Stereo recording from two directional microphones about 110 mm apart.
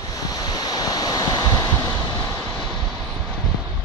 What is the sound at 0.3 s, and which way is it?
Waves, 35° left (ahead or behind).